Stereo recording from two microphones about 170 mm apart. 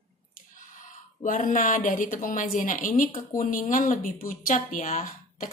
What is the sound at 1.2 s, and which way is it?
Speech, 50° left (ahead or behind).